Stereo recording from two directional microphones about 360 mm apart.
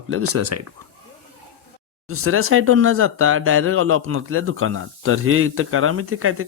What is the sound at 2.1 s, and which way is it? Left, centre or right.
Speech, right.